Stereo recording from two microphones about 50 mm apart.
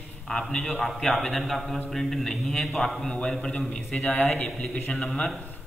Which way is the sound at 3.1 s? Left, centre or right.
Centre.